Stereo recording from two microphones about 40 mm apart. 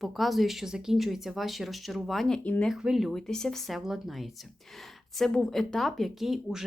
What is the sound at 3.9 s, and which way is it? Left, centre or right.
Speech, centre.